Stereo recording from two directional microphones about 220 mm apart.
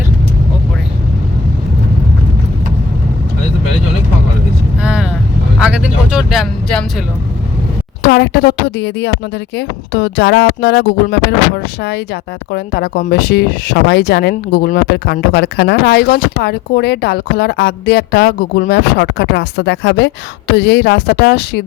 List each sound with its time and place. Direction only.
4.8 s vehicle: 5° right (ahead or behind)
5.5 s speech: 5° right (ahead or behind)
8.0 s speech: 45° left (ahead or behind)